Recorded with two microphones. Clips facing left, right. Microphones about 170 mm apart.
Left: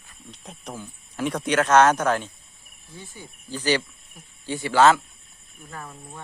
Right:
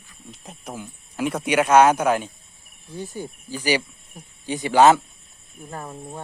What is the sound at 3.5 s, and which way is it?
Speech, 10° right (ahead or behind).